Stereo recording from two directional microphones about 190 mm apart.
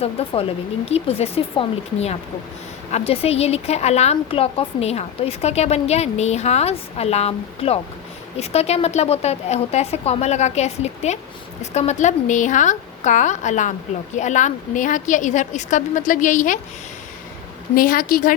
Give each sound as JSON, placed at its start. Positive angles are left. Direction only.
{"t": 0.0, "sound": "a woman's voice", "side_deg": 30}
{"t": 17.7, "sound": "a woman's voice", "side_deg": 50}